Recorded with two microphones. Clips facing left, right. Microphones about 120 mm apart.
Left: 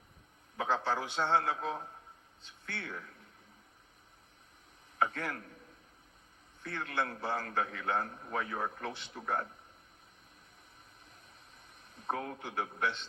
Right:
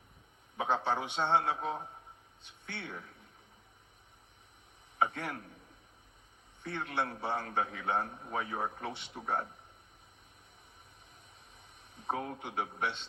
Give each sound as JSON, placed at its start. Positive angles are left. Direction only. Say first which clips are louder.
{"t": 0.5, "sound": "a man's voice", "louder": "right 1 dB", "side_deg": -20}
{"t": 4.9, "sound": "a man's voice", "louder": "even", "side_deg": -20}
{"t": 6.6, "sound": "a man's voice", "louder": "right 1 dB", "side_deg": -25}
{"t": 11.5, "sound": "a man's voice", "louder": "right 1 dB", "side_deg": -20}